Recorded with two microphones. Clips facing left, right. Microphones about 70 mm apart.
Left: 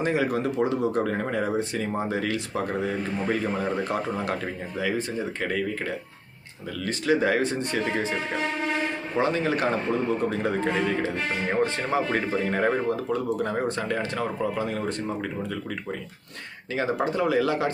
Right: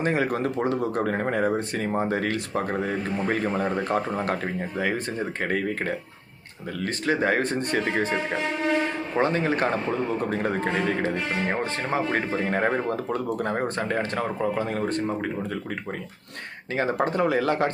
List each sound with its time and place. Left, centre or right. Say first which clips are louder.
0.0 s speech: even; right
9.1 s speech: right 1 dB; right
11.6 s speech: left 1 dB; right
13.1 s speech: even; right
16.7 s speech: right 1 dB; right